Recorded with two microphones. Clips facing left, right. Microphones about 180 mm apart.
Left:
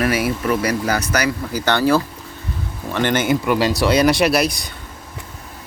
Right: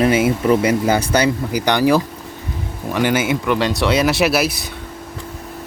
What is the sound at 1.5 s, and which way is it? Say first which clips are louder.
Speech: right 1 dB; 15° right (ahead or behind).